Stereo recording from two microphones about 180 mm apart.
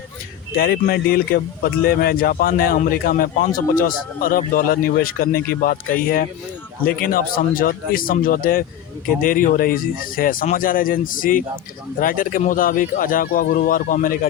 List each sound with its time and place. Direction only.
0.5 s a man's voice: 55° left (ahead or behind)